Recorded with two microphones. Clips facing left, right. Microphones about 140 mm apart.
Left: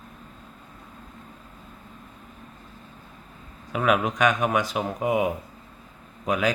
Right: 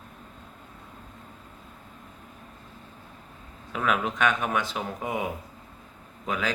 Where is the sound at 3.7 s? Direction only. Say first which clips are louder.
Left 4 dB; 10° left (ahead or behind).